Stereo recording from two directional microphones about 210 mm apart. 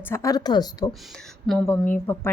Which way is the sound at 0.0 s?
15° left (ahead or behind).